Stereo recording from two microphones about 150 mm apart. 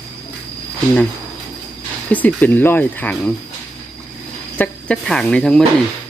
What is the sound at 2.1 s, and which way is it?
Speech, 10° left (ahead or behind).